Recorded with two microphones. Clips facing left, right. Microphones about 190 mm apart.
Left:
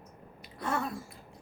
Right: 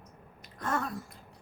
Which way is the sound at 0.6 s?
10° left (ahead or behind).